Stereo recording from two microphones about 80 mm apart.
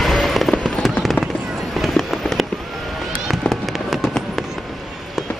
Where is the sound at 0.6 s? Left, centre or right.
Centre.